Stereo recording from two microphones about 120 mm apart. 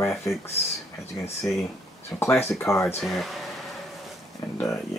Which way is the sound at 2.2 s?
20° left (ahead or behind).